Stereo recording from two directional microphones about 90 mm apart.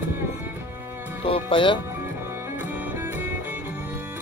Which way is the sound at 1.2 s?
90° left.